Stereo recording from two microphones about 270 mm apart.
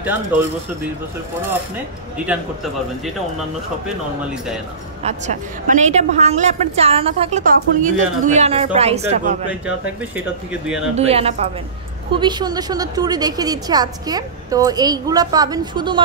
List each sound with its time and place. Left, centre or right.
5.0 s a woman's voice: right
9.5 s speech: centre
11.0 s a woman's voice: right